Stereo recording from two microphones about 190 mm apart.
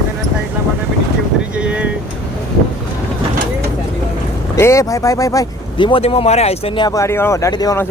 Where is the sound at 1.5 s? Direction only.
5° right (ahead or behind).